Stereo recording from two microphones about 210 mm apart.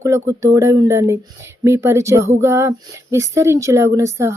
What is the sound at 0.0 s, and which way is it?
Speech, 15° right (ahead or behind).